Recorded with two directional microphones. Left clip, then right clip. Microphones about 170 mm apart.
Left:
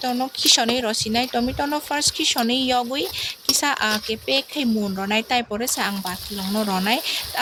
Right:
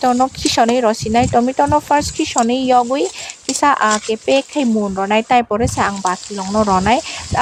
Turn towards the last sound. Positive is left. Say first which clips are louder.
# right 6 dB
turn(degrees=-30)  # may be behind; listen again after turning